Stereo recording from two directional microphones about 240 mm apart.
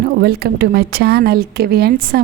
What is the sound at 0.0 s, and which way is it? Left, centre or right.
A woman's voice, right.